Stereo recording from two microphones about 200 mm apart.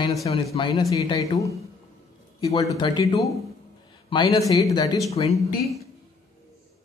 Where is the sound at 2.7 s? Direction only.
20° left (ahead or behind).